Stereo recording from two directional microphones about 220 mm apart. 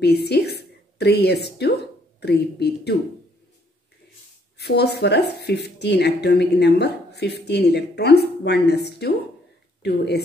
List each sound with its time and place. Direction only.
0.0 s a woman's voice: 50° left (ahead or behind)
4.6 s speech: 50° left (ahead or behind)